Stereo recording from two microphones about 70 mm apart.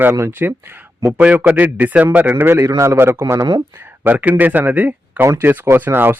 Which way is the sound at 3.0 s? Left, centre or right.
Right.